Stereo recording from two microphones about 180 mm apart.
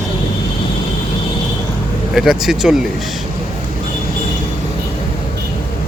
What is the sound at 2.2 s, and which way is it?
Speech, 5° right (ahead or behind).